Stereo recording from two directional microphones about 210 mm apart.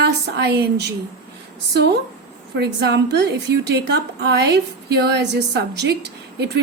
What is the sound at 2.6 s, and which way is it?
A woman's voice, 50° right (ahead or behind).